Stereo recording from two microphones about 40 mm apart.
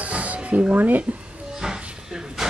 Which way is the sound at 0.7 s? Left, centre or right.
Right.